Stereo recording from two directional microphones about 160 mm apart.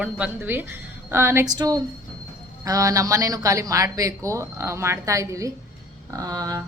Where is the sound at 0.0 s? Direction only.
10° right (ahead or behind).